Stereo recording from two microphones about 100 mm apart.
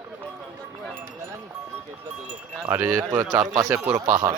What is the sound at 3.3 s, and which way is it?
Speech, 45° right (ahead or behind).